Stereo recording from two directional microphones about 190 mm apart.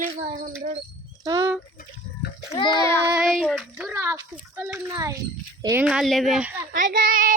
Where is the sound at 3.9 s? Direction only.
15° right (ahead or behind).